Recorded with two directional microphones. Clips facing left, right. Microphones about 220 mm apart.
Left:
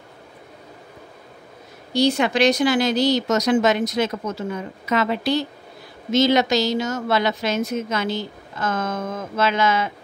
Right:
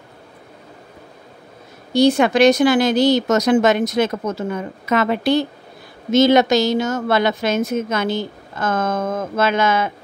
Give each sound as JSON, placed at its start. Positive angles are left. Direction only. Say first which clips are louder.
{"t": 2.0, "sound": "a woman's voice", "louder": "right 5 dB", "side_deg": -50}